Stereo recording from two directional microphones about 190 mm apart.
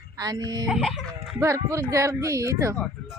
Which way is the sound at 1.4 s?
15° right (ahead or behind).